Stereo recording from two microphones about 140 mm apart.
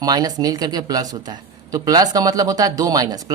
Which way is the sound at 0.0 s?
30° right (ahead or behind).